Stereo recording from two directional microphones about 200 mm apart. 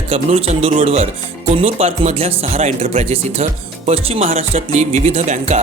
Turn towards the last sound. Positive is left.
turn(degrees=-35)  # may be behind; listen again after turning